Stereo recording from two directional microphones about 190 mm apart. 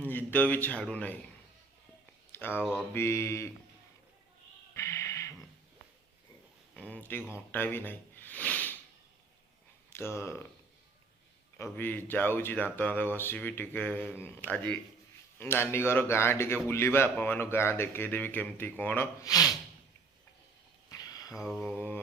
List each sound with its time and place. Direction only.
0.0 s speech: 10° left (ahead or behind)
2.3 s speech: 10° left (ahead or behind)
4.7 s music: 15° left (ahead or behind)
6.7 s speech: 10° left (ahead or behind)
9.9 s speech: 15° left (ahead or behind)
11.5 s speech: 10° left (ahead or behind)
20.9 s a sound: 20° left (ahead or behind)
21.3 s mantra: centre (ahead or behind)
21.6 s speech: 10° left (ahead or behind)